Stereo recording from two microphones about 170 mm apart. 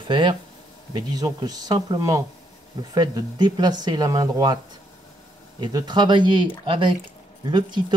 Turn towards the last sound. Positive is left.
turn(degrees=-25)  # may be behind; listen again after turning